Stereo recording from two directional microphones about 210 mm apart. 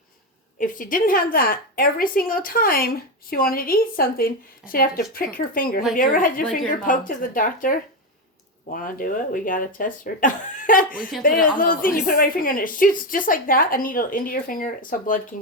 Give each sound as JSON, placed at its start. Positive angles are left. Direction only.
{"t": 0.6, "sound": "a woman's voice", "side_deg": 40}